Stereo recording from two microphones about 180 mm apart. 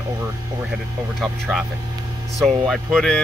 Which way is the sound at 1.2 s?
Centre (ahead or behind).